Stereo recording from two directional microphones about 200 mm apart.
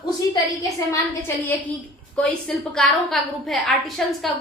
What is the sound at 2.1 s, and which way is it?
A woman's voice, 5° left (ahead or behind).